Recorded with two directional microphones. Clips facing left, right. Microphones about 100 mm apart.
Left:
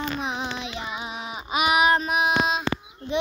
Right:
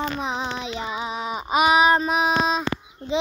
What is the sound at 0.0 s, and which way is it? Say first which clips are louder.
Child singing: right 2 dB; 35° right (ahead or behind).